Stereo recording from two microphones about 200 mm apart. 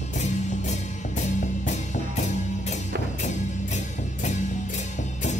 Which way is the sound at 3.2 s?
35° left (ahead or behind).